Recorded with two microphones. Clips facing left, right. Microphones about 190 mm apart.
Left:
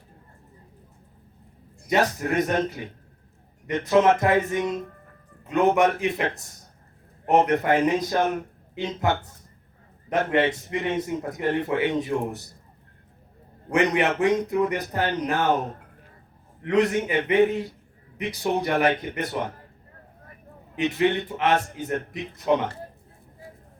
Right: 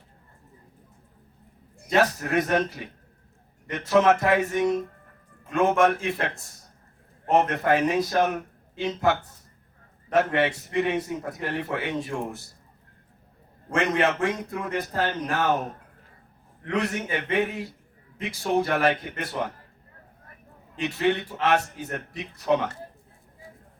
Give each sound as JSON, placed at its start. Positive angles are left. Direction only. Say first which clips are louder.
{"t": 1.9, "sound": "a man's voice", "louder": "even", "side_deg": 20}
{"t": 7.3, "sound": "a man's voice", "louder": "left 2 dB", "side_deg": 20}
{"t": 10.1, "sound": "a man's voice", "louder": "even", "side_deg": 20}
{"t": 13.7, "sound": "a man's voice", "louder": "left 2 dB", "side_deg": 15}
{"t": 16.6, "sound": "a man's voice", "louder": "left 6 dB", "side_deg": 20}
{"t": 20.7, "sound": "a man's voice", "louder": "left 2 dB", "side_deg": 20}